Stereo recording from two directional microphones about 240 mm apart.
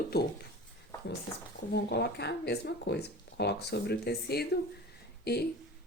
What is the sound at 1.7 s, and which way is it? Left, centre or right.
Speech, left.